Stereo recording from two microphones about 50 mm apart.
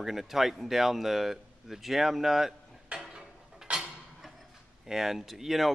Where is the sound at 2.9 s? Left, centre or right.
Centre.